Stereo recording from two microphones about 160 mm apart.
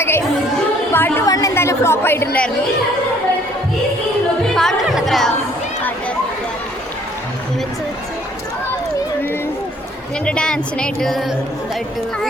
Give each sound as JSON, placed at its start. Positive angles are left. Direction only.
{"t": 0.0, "sound": "chatter", "side_deg": 15}
{"t": 4.5, "sound": "music", "side_deg": 0}
{"t": 10.2, "sound": "speech", "side_deg": 5}